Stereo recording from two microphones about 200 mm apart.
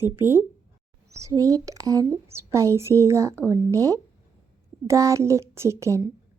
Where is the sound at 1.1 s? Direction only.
15° right (ahead or behind).